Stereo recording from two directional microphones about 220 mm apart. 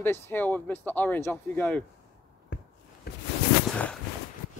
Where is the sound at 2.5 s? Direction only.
45° left (ahead or behind).